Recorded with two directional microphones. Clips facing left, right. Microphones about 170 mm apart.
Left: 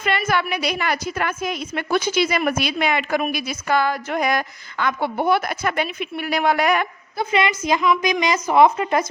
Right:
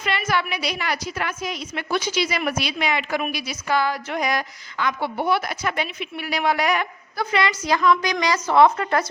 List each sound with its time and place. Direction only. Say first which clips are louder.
0.0 s a woman's voice: left 3 dB; 50° left (ahead or behind)
7.2 s a woman's voice: left 2 dB; 20° left (ahead or behind)